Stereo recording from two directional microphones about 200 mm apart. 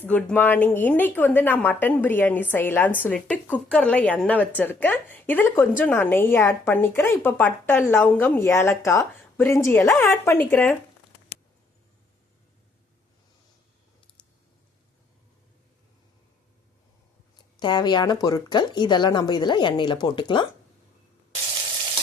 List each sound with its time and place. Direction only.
0.0 s a woman's voice: 5° left (ahead or behind)
17.3 s speech: 20° left (ahead or behind)